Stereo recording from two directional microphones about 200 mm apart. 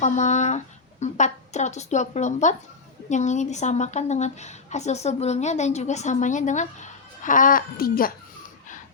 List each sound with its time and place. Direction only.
0.0 s a woman's voice: 35° left (ahead or behind)